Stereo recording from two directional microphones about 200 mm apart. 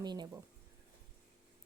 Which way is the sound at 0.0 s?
20° right (ahead or behind).